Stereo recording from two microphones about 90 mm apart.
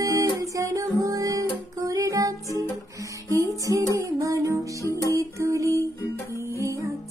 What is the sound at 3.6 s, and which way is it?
Music, 40° right (ahead or behind).